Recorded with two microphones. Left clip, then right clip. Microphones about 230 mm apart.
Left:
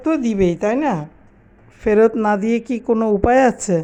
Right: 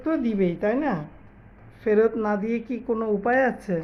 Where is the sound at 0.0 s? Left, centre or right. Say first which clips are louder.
Left 7 dB; left.